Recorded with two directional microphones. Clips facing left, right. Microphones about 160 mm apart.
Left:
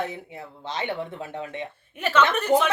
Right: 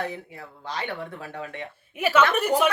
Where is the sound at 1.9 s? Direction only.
10° right (ahead or behind).